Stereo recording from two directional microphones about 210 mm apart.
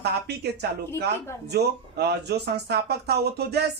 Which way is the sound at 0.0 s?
50° right (ahead or behind).